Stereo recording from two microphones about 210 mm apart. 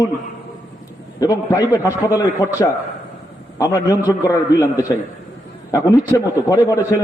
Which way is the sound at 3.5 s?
15° left (ahead or behind).